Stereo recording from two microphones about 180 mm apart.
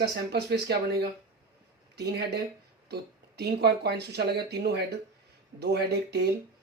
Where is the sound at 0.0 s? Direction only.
65° right (ahead or behind).